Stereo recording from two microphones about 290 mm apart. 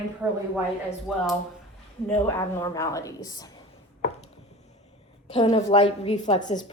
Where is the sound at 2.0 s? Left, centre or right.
Centre; by 4.7 s left.